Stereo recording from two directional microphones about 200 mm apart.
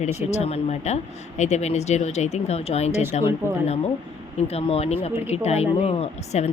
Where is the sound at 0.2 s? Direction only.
35° left (ahead or behind).